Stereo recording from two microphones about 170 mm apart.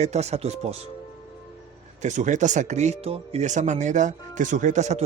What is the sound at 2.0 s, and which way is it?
Speech, 45° right (ahead or behind).